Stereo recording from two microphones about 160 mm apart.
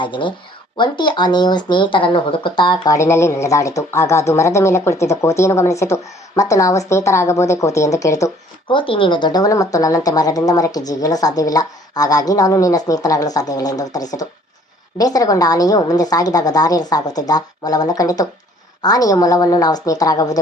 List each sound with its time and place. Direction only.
0.0 s speech: 30° left (ahead or behind)
8.6 s speech: 35° left (ahead or behind)